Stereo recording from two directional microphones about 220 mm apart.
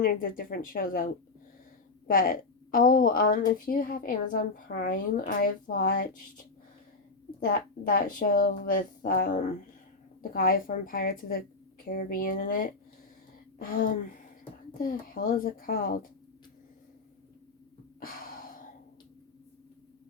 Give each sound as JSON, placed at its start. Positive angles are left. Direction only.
{"t": 0.0, "sound": "speech", "side_deg": 40}
{"t": 7.4, "sound": "speech", "side_deg": 45}
{"t": 18.0, "sound": "gasp", "side_deg": 40}